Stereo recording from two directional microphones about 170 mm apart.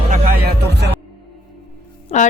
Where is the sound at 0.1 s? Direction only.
60° right (ahead or behind); by 0.9 s 75° right (ahead or behind).